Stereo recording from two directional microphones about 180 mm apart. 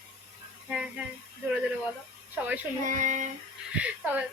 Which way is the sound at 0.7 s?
5° right (ahead or behind).